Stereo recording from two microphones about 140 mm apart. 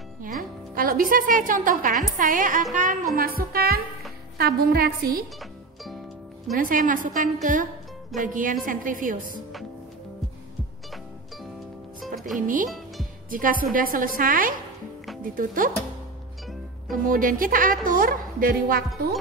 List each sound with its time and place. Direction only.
0.2 s a woman's voice: 75° right (ahead or behind)
3.2 s a woman's voice: 90° right
6.5 s a woman's voice: 70° right (ahead or behind)
12.4 s a woman's voice: 70° right (ahead or behind)
12.6 s music: centre (ahead or behind)
13.3 s a woman's voice: 80° right
16.9 s a woman's voice: 75° right (ahead or behind)